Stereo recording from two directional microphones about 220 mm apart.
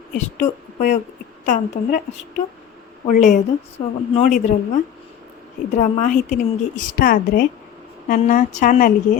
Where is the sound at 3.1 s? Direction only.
35° left (ahead or behind).